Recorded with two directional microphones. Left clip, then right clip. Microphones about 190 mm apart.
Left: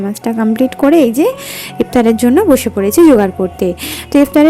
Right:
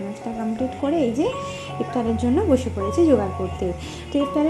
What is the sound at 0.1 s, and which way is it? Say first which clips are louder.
A woman's voice: left 12 dB; 45° left (ahead or behind).